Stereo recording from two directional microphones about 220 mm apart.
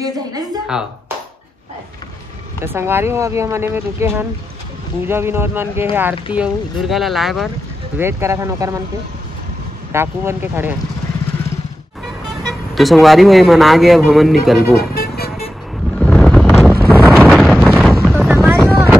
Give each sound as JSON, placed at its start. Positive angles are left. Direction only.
{"t": 0.7, "sound": "speech", "side_deg": -5}
{"t": 2.6, "sound": "speech", "side_deg": -10}
{"t": 8.0, "sound": "speech", "side_deg": -10}
{"t": 9.9, "sound": "speech", "side_deg": -10}
{"t": 12.4, "sound": "speech", "side_deg": 0}
{"t": 14.8, "sound": "vehicle", "side_deg": 45}
{"t": 16.0, "sound": "wind noise", "side_deg": 0}